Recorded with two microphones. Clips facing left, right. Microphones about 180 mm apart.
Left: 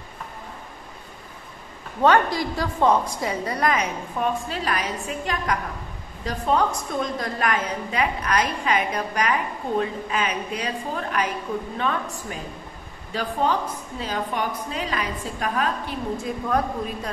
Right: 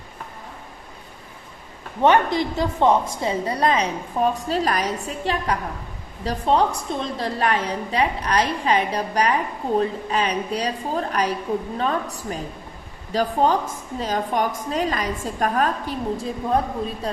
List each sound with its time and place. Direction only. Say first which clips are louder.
2.0 s a woman's voice: right 1 dB; 20° right (ahead or behind); by 15.7 s 45° right (ahead or behind)
16.4 s a woman's voice: right 2 dB; 25° right (ahead or behind)